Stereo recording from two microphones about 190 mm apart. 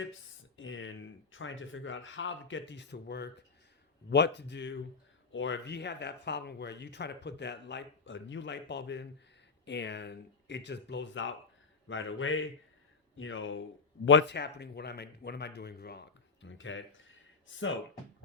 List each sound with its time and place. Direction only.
0.0 s speech: 90° left
11.9 s a man's voice: 90° left
14.0 s speech: 75° left (ahead or behind)